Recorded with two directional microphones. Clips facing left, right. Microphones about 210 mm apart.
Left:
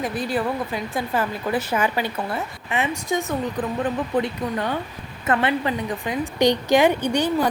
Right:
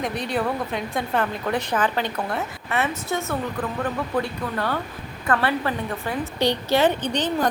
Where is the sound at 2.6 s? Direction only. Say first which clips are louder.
Left 2 dB; 15° left (ahead or behind).